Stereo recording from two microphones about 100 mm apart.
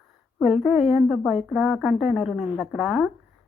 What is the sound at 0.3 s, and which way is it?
A woman's voice, centre (ahead or behind).